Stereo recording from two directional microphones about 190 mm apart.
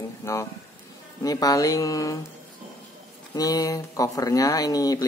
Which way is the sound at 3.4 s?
20° left (ahead or behind).